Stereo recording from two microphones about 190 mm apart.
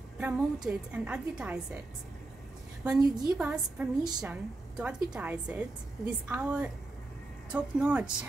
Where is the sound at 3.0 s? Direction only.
20° right (ahead or behind).